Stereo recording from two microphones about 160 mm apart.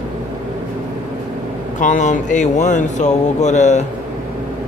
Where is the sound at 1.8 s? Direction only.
50° left (ahead or behind).